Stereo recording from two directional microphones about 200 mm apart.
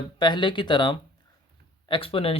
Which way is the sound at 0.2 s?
25° left (ahead or behind).